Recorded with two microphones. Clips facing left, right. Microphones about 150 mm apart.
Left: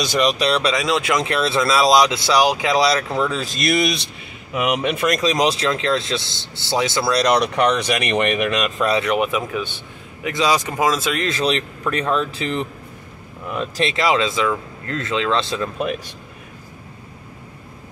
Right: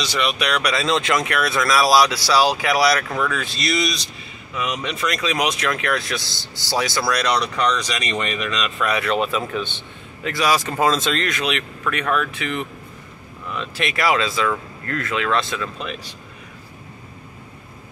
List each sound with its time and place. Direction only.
0.0 s speech: 45° left (ahead or behind)
0.7 s speech: 10° left (ahead or behind)
1.2 s speech: 25° left (ahead or behind)
3.4 s speech: 50° left (ahead or behind); by 7.2 s 25° left (ahead or behind)
7.2 s speech: 55° left (ahead or behind)
8.9 s speech: 20° left (ahead or behind)
11.2 s speech: 35° left (ahead or behind)
13.5 s speech: 45° left (ahead or behind)
13.8 s speech: 20° left (ahead or behind)